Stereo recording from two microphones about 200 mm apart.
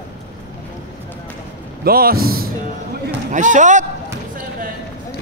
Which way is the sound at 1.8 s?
50° right (ahead or behind).